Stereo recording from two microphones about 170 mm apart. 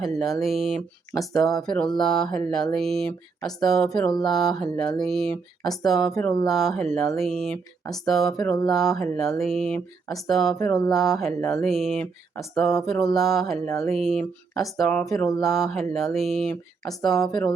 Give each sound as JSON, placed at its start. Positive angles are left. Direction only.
{"t": 0.0, "sound": "speech", "side_deg": 0}
{"t": 1.1, "sound": "speech", "side_deg": 20}
{"t": 1.4, "sound": "speech", "side_deg": 0}